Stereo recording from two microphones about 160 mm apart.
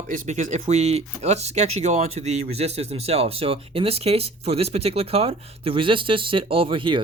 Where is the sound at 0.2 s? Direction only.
50° right (ahead or behind).